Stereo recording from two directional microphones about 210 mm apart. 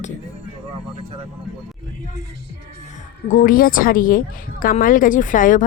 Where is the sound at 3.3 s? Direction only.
40° left (ahead or behind).